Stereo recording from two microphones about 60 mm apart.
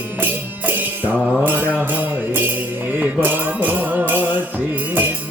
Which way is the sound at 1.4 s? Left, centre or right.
Right.